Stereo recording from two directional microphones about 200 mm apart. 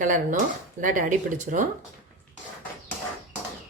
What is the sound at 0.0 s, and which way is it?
Speech, 40° right (ahead or behind).